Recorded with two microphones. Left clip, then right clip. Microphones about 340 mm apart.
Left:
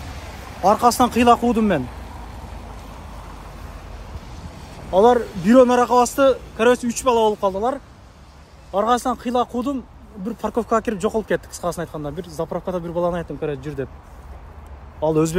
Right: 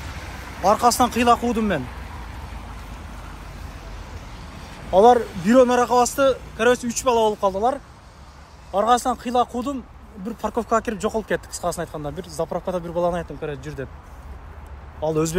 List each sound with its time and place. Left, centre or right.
0.6 s speech: centre
4.5 s a sound: left
5.4 s speech: left
15.0 s speech: left